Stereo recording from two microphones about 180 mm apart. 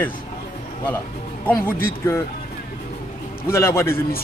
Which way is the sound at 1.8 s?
15° left (ahead or behind).